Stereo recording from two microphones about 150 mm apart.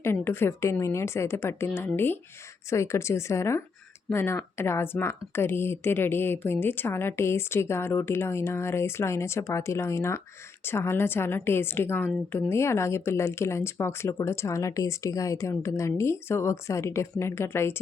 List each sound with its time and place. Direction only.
0.0 s a woman's voice: 15° left (ahead or behind)